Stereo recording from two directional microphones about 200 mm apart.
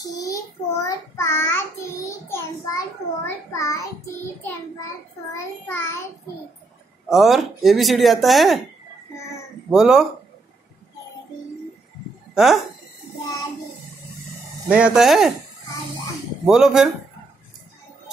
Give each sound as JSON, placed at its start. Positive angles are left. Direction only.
{"t": 0.0, "sound": "child singing", "side_deg": 15}
{"t": 3.3, "sound": "a child's voice", "side_deg": 15}
{"t": 5.7, "sound": "child singing", "side_deg": 10}
{"t": 7.1, "sound": "speech", "side_deg": 0}
{"t": 9.7, "sound": "speech", "side_deg": 0}
{"t": 12.4, "sound": "speech", "side_deg": 0}
{"t": 14.7, "sound": "speech", "side_deg": -5}
{"t": 16.4, "sound": "speech", "side_deg": 0}